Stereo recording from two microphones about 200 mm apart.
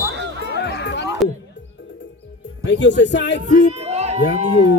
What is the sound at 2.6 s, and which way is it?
Speech, 60° left (ahead or behind).